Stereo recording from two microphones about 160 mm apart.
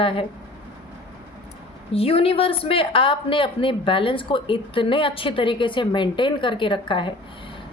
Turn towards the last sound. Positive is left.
turn(degrees=30)  # may be behind; listen again after turning